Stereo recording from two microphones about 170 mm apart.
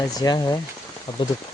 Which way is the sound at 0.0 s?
20° left (ahead or behind).